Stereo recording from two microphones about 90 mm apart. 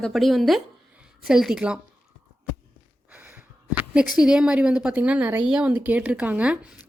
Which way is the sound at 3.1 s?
15° right (ahead or behind).